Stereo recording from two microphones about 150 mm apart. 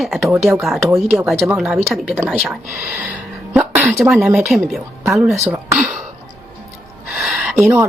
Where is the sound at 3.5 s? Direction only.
10° right (ahead or behind).